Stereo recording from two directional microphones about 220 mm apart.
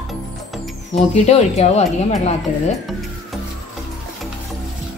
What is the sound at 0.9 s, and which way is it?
Speech, 30° left (ahead or behind).